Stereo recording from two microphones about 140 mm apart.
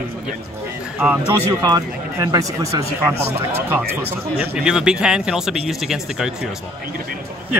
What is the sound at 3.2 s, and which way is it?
A man's voice, 15° right (ahead or behind).